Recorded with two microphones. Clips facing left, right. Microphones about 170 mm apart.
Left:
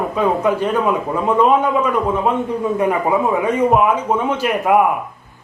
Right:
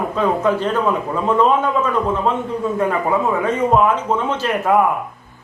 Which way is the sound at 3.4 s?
10° left (ahead or behind).